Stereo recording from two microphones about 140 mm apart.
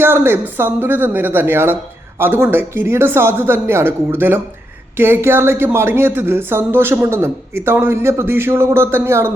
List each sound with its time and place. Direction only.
0.0 s speech: 15° right (ahead or behind)